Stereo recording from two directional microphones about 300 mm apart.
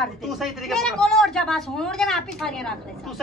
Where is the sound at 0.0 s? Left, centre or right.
Centre.